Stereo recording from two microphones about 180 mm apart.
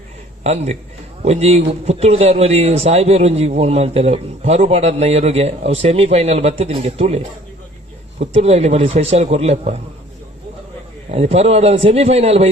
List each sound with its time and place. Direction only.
0.4 s a man's voice: 35° right (ahead or behind)
11.1 s a man's voice: 35° right (ahead or behind)